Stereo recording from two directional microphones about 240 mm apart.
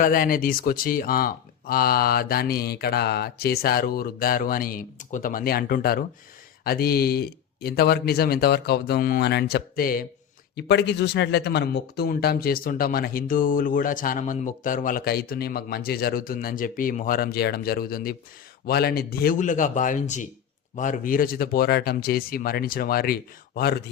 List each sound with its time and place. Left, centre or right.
0.0 s a man's voice: left